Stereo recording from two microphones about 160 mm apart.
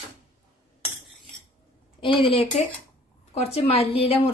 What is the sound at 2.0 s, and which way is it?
A woman's voice, 30° left (ahead or behind).